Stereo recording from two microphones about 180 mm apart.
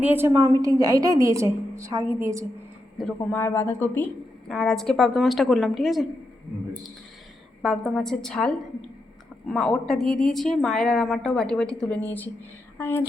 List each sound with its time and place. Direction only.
0.0 s a woman's voice: 10° right (ahead or behind)
3.0 s a woman's voice: 5° left (ahead or behind)
7.6 s a woman's voice: centre (ahead or behind)